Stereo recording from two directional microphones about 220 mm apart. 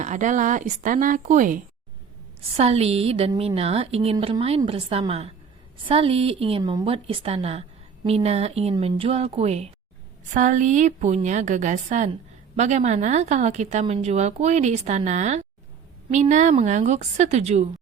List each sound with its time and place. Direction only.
0.0 s a woman's voice: 35° right (ahead or behind)